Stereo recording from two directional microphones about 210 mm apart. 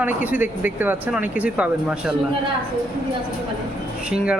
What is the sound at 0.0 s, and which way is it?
Speech, 10° right (ahead or behind).